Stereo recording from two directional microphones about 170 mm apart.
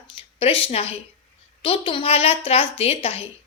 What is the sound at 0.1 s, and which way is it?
A woman's voice, 35° left (ahead or behind).